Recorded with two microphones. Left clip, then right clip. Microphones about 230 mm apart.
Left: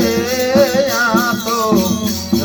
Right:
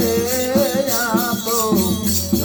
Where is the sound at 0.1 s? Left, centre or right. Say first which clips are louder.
Left 4 dB; left.